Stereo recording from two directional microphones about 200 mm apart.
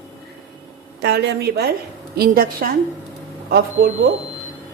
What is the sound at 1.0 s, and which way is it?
A woman's voice, 55° right (ahead or behind).